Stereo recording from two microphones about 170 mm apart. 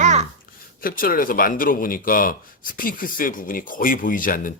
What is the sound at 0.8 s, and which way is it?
Speech, 55° left (ahead or behind).